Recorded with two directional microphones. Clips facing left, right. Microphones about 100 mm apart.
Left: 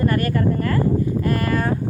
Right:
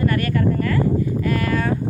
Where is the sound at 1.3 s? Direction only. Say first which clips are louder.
Even; 40° left (ahead or behind).